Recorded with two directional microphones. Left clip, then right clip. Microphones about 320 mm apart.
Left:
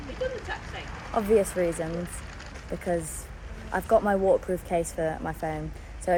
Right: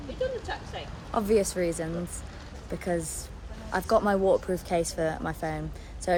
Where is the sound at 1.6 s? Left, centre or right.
Centre.